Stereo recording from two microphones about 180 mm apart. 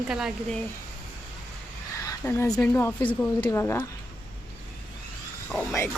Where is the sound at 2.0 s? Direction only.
10° left (ahead or behind).